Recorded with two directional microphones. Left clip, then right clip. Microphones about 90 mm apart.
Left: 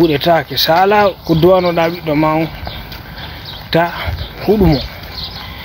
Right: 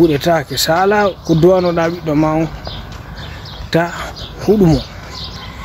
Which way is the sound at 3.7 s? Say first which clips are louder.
Left 2 dB; 35° right (ahead or behind).